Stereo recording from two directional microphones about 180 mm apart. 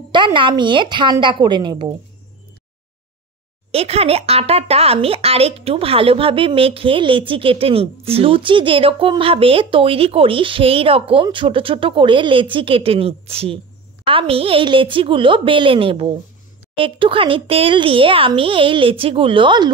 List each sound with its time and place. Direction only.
0.1 s speech: 25° right (ahead or behind)
3.7 s speech: 35° right (ahead or behind)